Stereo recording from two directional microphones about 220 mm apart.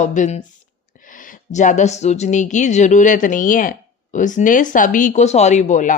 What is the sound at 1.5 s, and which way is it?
Speech, 35° left (ahead or behind).